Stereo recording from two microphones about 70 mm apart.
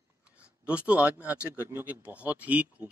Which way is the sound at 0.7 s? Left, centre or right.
Centre.